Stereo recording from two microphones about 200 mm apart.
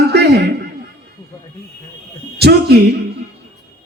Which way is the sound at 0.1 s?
55° right (ahead or behind).